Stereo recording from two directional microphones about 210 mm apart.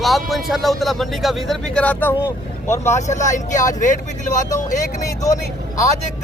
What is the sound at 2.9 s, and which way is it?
Speech, 35° left (ahead or behind).